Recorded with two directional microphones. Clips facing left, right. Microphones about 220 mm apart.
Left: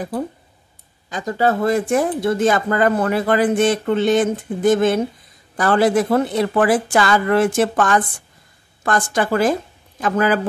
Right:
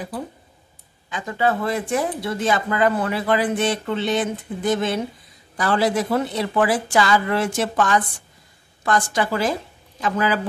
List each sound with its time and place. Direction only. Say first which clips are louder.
1.1 s speech: left 3 dB; 40° left (ahead or behind)